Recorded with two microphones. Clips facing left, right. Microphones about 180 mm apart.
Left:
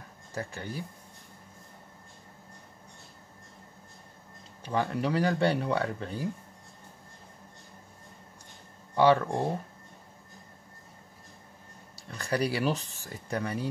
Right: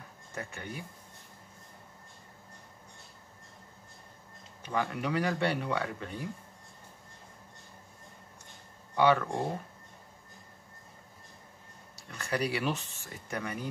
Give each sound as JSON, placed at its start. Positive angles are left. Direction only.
{"t": 0.3, "sound": "speech", "side_deg": 35}
{"t": 4.6, "sound": "speech", "side_deg": 30}
{"t": 8.9, "sound": "speech", "side_deg": 30}
{"t": 11.9, "sound": "speech", "side_deg": 35}